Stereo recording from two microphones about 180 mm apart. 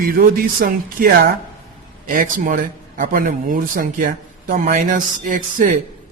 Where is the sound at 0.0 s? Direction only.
55° right (ahead or behind).